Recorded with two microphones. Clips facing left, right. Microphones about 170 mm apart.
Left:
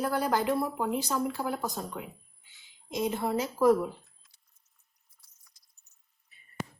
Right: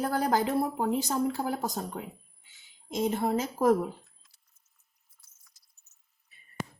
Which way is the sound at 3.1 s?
50° right (ahead or behind).